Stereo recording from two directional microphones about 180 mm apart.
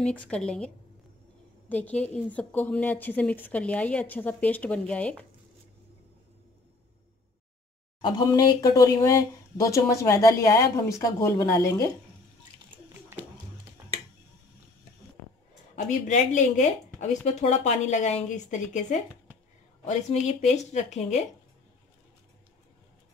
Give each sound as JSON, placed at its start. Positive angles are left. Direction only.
{"t": 0.3, "sound": "a woman's voice", "side_deg": 5}
{"t": 1.7, "sound": "speech", "side_deg": 10}
{"t": 8.0, "sound": "speech", "side_deg": 25}
{"t": 15.7, "sound": "speech", "side_deg": 40}